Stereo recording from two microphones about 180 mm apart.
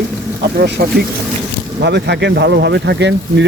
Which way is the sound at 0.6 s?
60° right (ahead or behind).